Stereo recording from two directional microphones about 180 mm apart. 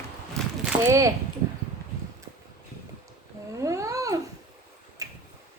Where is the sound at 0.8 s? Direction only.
15° right (ahead or behind).